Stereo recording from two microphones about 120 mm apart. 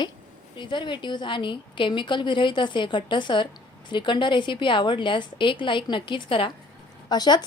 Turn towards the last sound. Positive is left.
turn(degrees=35)  # may be behind; listen again after turning